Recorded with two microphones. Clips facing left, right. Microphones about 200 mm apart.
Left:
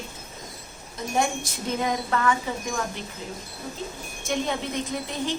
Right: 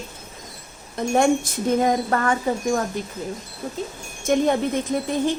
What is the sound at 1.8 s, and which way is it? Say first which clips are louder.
A child's voice: right 1 dB; 45° right (ahead or behind).